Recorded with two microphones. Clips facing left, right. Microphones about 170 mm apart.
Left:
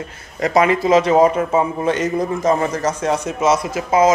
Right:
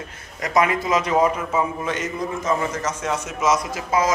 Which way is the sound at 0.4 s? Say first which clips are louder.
Left 5 dB; 30° left (ahead or behind).